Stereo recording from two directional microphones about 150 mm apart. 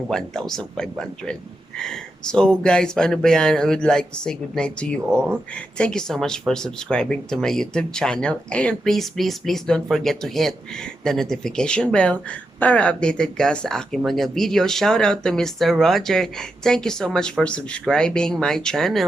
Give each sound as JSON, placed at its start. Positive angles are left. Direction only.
{"t": 0.1, "sound": "speech", "side_deg": 5}